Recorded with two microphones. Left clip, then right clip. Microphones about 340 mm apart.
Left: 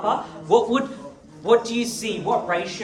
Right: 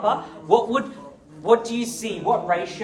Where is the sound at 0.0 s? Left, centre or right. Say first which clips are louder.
Right 1 dB; right.